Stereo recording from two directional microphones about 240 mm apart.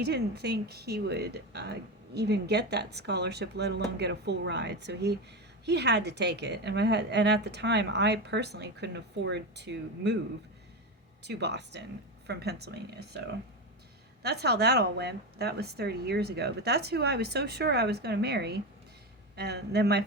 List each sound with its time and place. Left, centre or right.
0.0 s a woman's voice: right
11.2 s a woman's voice: right